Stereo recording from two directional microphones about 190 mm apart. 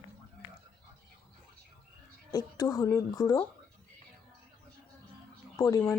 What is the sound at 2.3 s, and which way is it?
A woman's voice, 20° left (ahead or behind).